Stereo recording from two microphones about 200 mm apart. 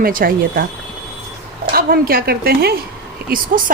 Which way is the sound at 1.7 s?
50° right (ahead or behind).